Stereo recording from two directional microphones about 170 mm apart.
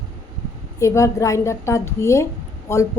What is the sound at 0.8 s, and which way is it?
A woman's voice, 20° left (ahead or behind).